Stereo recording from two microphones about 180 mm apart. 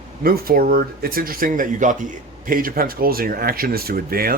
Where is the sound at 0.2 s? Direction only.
55° right (ahead or behind).